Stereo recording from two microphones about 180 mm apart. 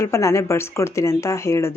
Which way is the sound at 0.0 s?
15° left (ahead or behind).